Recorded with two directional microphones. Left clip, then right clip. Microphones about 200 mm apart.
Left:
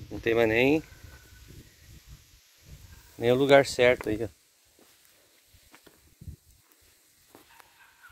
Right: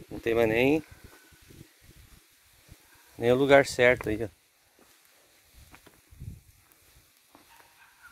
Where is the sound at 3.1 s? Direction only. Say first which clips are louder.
Even; 5° right (ahead or behind).